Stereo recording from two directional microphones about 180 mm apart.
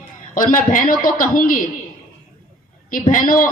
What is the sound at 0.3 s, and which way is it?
A woman's voice, 45° left (ahead or behind).